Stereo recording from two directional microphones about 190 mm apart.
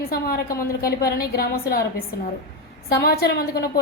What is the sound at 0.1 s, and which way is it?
A woman's voice, 50° left (ahead or behind).